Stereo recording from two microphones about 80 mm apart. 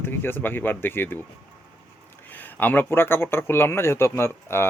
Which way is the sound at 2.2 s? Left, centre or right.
Left.